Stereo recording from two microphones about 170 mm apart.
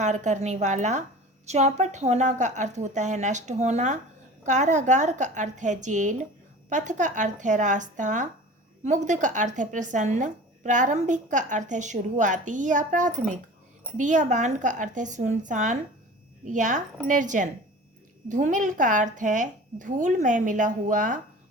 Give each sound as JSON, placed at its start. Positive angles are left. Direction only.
{"t": 0.0, "sound": "speech", "side_deg": -45}